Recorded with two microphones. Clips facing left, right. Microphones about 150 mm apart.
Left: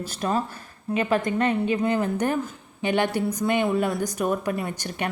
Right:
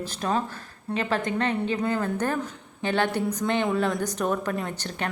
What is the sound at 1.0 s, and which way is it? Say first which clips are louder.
A woman's voice: left 3 dB; 15° left (ahead or behind).